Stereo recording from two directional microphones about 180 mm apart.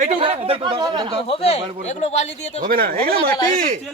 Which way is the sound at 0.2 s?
30° right (ahead or behind).